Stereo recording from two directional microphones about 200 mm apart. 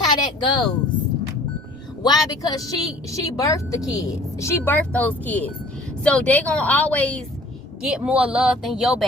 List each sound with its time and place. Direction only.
0.0 s a sound: 20° left (ahead or behind)
2.0 s a woman's voice: 20° left (ahead or behind)
7.8 s speech: 5° right (ahead or behind)